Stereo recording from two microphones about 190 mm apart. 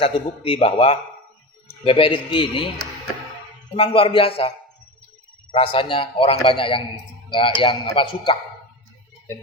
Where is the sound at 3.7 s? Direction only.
30° left (ahead or behind).